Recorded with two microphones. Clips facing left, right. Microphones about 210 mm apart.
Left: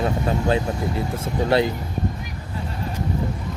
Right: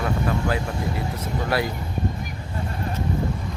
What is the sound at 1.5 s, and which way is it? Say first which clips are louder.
Speech: left 6 dB; 25° left (ahead or behind).